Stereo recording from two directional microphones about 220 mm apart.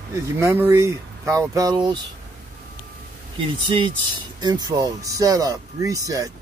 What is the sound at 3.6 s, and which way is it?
Speech, 20° right (ahead or behind).